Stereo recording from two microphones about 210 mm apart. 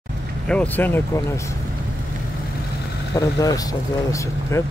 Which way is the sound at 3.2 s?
15° left (ahead or behind).